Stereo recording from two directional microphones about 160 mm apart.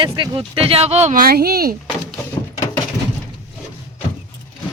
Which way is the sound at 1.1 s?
70° right (ahead or behind).